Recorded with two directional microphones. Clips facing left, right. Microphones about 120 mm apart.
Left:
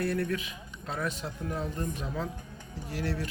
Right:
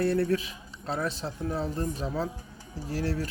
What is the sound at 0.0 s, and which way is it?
Speech, 30° right (ahead or behind).